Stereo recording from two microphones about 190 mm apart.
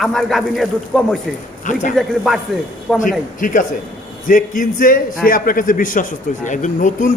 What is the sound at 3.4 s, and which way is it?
A man's voice, 45° left (ahead or behind).